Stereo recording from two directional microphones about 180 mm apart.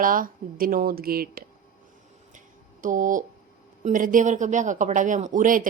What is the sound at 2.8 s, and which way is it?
Speech, 45° right (ahead or behind).